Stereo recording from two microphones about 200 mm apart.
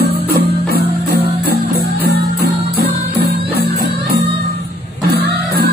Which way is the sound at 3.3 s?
50° right (ahead or behind).